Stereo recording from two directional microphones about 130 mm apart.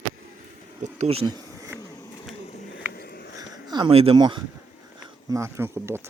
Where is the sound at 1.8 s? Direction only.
25° left (ahead or behind).